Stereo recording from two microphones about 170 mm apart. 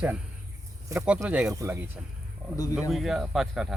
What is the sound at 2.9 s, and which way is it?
Speech, centre (ahead or behind).